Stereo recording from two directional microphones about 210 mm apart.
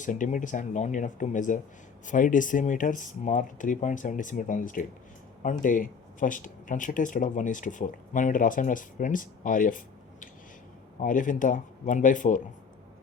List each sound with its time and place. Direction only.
0.0 s speech: 35° left (ahead or behind)